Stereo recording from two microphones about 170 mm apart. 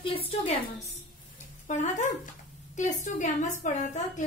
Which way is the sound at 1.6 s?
45° left (ahead or behind).